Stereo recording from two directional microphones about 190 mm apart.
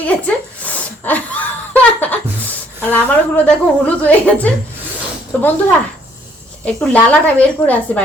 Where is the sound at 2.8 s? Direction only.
10° left (ahead or behind).